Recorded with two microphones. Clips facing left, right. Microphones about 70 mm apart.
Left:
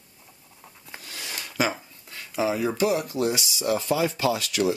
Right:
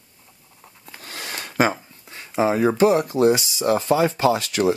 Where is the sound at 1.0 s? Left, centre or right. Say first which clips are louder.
Right 5 dB; right.